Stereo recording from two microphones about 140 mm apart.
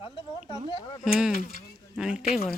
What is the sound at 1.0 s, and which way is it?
Speech, 5° right (ahead or behind).